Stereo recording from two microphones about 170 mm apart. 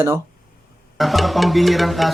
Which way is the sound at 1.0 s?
Centre (ahead or behind).